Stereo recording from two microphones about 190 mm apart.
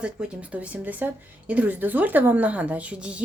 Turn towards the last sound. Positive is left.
turn(degrees=-5)  # may be behind; listen again after turning